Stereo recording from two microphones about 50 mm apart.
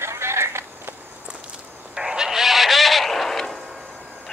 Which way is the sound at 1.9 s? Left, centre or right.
Centre.